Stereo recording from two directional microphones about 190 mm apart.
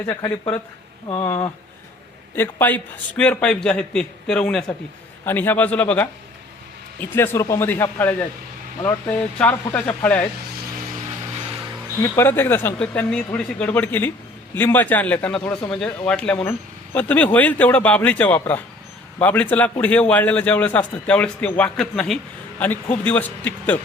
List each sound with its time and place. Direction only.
0.0 s a man's voice: 15° left (ahead or behind)
12.0 s a man's voice: 10° left (ahead or behind)